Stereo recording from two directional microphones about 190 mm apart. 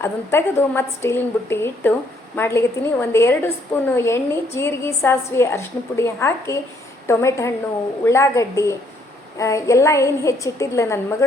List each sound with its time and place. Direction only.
0.0 s a woman's voice: 10° left (ahead or behind)